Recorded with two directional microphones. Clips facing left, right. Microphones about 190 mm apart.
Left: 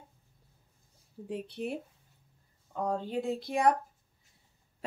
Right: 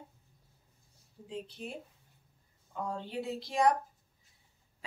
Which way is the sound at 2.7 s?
45° left (ahead or behind).